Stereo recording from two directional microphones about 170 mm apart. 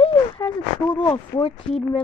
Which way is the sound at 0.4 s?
25° left (ahead or behind).